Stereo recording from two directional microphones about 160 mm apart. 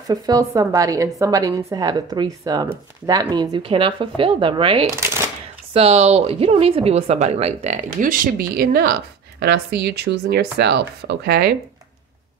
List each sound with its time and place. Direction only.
0.1 s a woman's voice: 20° right (ahead or behind); by 8.9 s 70° right (ahead or behind)
9.4 s speech: 90° right